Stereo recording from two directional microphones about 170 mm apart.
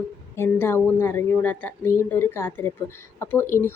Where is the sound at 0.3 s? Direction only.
15° left (ahead or behind).